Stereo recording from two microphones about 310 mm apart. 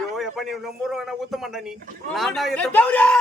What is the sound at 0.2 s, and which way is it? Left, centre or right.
Speech, centre.